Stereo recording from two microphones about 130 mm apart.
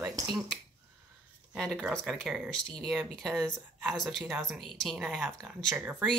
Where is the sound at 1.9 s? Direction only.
Centre (ahead or behind).